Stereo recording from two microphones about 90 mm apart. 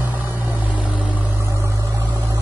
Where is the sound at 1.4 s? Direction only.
30° right (ahead or behind).